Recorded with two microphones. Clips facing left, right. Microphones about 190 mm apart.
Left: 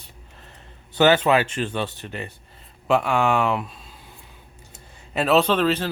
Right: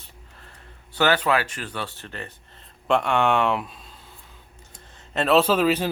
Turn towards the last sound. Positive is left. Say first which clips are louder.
# even
turn(degrees=-10)  # may be behind; listen again after turning